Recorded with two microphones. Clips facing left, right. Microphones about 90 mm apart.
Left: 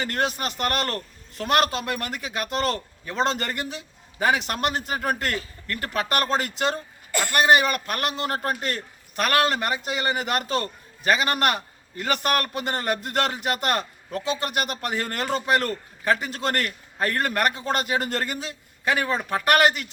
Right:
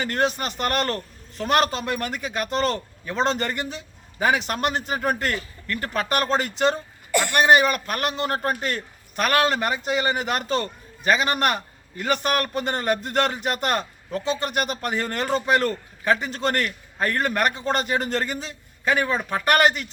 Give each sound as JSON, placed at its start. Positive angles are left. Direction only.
{"t": 0.0, "sound": "a man's voice", "side_deg": 0}